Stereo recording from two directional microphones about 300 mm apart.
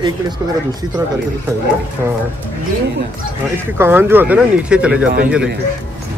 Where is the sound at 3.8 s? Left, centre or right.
Centre.